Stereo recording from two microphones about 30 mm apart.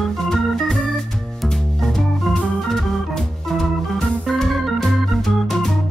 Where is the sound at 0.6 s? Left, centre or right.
Centre.